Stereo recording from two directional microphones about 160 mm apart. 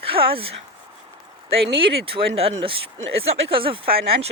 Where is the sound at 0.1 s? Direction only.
35° right (ahead or behind).